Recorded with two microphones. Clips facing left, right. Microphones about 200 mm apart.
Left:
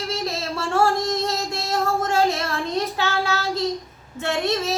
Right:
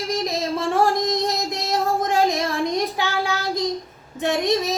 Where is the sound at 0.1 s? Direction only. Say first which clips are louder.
Right 6 dB; 15° right (ahead or behind).